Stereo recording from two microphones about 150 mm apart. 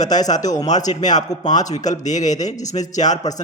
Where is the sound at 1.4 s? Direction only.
25° left (ahead or behind).